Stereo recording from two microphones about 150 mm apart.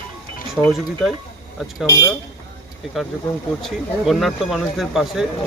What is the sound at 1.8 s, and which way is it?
Speech, 20° left (ahead or behind).